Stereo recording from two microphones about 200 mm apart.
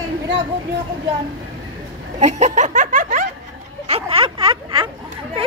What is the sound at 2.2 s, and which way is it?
Snicker, 35° right (ahead or behind).